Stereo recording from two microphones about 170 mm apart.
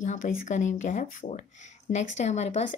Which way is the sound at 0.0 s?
50° left (ahead or behind).